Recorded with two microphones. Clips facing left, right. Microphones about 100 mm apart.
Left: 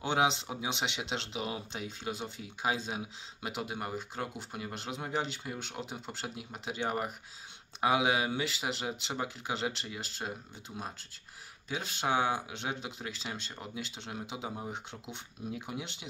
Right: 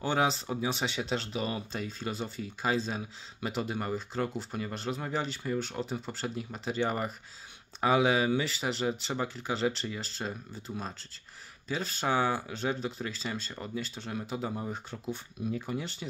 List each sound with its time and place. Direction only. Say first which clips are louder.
0.0 s speech: right 1 dB; 20° left (ahead or behind)
10.7 s speech: right 5 dB; 5° right (ahead or behind)
11.7 s speech: right 2 dB; 15° left (ahead or behind)